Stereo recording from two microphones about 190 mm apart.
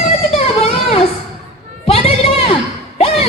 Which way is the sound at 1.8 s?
30° left (ahead or behind).